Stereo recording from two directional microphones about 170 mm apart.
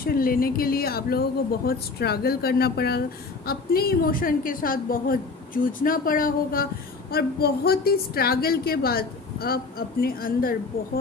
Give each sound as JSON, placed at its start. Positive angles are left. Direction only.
{"t": 0.0, "sound": "a woman's voice", "side_deg": 60}